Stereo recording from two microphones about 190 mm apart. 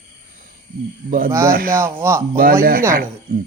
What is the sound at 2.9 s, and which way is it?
Speech, 45° right (ahead or behind).